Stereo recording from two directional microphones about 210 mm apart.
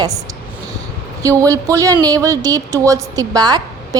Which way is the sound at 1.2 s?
15° right (ahead or behind).